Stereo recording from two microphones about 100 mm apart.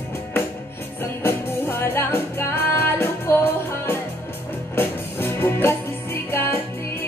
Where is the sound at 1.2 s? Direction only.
25° left (ahead or behind).